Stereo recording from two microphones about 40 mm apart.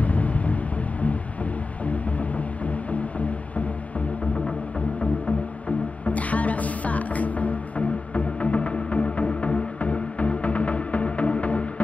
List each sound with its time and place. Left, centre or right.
0.0 s music: left
4.7 s music: left